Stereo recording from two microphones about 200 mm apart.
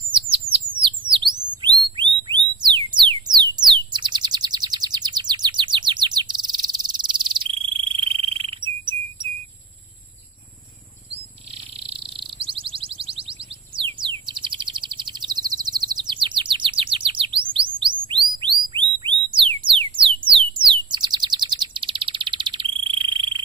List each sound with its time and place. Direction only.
0.1 s bird: 25° right (ahead or behind)
2.2 s music: 20° right (ahead or behind)
11.5 s a sound: 30° right (ahead or behind)
17.5 s music: 25° right (ahead or behind)
20.2 s bird: 25° right (ahead or behind)